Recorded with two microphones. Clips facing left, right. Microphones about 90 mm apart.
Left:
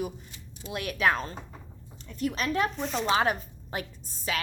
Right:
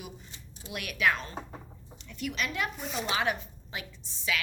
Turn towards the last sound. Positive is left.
turn(degrees=45)  # may be behind; listen again after turning